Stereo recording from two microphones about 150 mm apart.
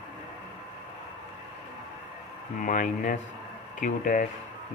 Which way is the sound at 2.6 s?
60° left (ahead or behind).